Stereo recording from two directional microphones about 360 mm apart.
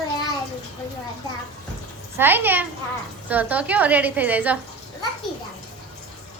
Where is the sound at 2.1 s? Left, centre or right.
Centre.